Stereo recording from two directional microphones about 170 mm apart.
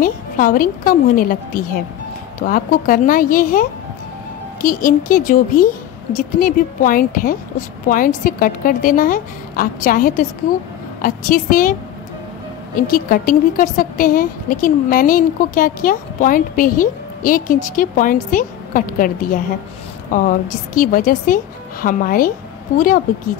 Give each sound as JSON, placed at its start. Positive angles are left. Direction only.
{"t": 0.0, "sound": "a woman's voice", "side_deg": 55}
{"t": 12.7, "sound": "a woman's voice", "side_deg": 55}